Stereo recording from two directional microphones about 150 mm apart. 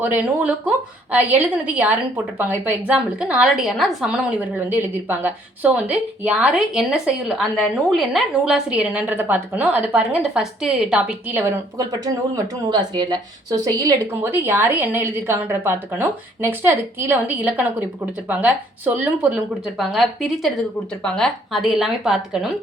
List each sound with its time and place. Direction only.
0.0 s a woman's voice: 10° right (ahead or behind)
4.5 s a woman's voice: 15° right (ahead or behind)
14.2 s a woman's voice: 15° right (ahead or behind)